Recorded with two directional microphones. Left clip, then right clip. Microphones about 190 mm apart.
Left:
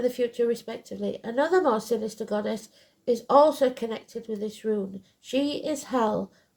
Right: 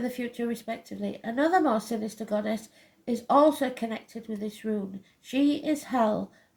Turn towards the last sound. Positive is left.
turn(degrees=45)  # may be behind; listen again after turning